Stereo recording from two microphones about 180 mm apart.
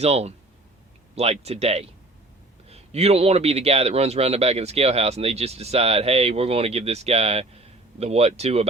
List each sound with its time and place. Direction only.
0.0 s a man's voice: 35° right (ahead or behind)